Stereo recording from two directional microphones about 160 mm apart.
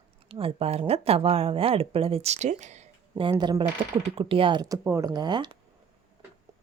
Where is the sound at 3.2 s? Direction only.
30° right (ahead or behind).